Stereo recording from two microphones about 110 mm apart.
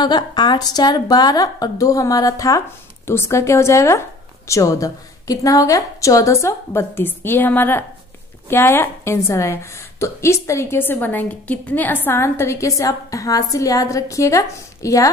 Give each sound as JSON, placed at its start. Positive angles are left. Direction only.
{"t": 0.0, "sound": "a woman's voice", "side_deg": 40}